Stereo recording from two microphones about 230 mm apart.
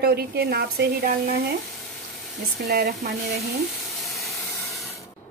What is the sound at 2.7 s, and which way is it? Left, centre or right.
Speech, right.